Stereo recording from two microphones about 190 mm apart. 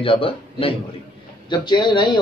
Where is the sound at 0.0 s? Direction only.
30° left (ahead or behind).